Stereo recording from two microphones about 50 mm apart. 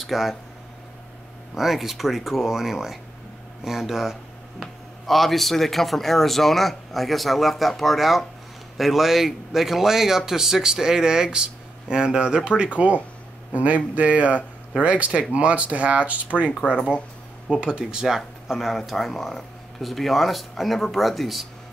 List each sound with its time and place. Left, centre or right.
0.0 s speech: centre
1.5 s a man's voice: centre; by 16.2 s right
16.6 s speech: left
17.5 s speech: centre